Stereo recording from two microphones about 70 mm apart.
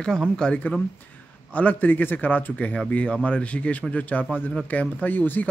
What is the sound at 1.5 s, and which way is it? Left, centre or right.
Speech, left.